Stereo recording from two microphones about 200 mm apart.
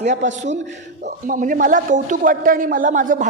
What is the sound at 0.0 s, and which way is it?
A man's voice, 40° right (ahead or behind).